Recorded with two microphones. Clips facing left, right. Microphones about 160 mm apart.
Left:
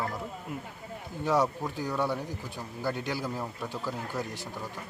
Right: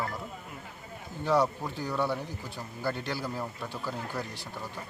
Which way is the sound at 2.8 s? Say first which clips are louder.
Left 1 dB; 10° left (ahead or behind).